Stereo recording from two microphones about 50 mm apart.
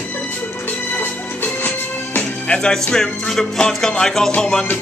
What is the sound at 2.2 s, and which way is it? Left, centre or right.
Music, left.